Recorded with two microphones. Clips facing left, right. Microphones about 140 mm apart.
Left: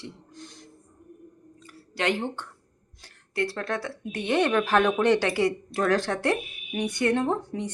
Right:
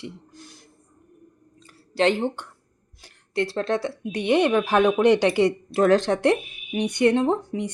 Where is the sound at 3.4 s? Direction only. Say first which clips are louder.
Right 5 dB; 25° right (ahead or behind).